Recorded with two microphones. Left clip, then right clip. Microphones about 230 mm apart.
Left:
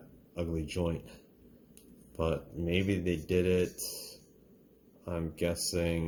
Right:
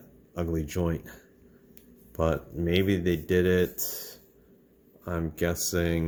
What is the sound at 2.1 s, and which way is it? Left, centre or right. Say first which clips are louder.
Speech: right 6 dB; right.